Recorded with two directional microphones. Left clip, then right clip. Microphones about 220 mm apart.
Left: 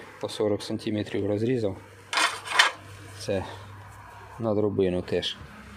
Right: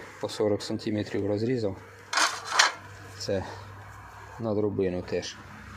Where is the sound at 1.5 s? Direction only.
10° left (ahead or behind).